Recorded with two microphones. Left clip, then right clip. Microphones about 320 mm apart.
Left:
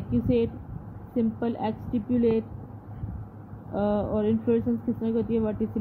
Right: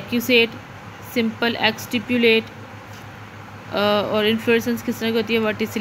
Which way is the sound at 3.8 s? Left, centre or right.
Right.